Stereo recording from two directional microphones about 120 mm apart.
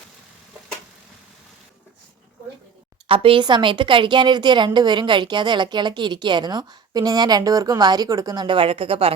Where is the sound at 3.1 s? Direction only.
50° right (ahead or behind).